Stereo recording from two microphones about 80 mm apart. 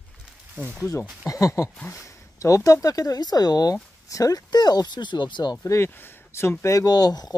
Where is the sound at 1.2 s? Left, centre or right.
Left.